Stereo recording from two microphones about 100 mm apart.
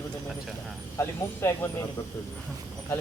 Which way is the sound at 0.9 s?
30° left (ahead or behind).